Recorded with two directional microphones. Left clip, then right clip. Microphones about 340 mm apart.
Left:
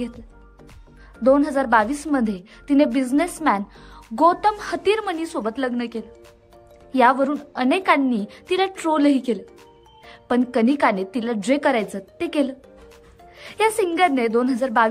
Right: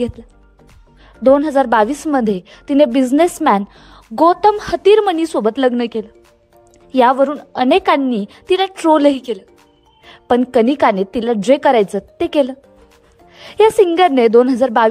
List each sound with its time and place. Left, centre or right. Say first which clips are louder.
1.2 s a woman's voice: right 6 dB; centre